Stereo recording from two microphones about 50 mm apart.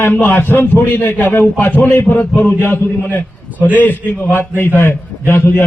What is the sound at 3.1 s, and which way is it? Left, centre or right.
A man's voice, left.